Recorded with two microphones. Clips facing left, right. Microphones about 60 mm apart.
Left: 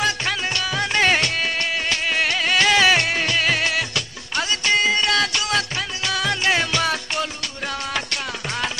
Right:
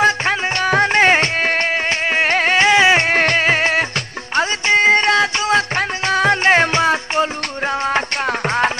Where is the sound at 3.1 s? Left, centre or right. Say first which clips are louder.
Right 6 dB; right.